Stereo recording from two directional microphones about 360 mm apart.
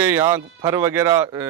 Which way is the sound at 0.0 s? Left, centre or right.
Centre.